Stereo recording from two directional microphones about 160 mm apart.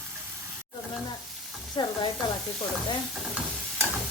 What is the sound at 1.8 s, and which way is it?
Stir, 25° left (ahead or behind).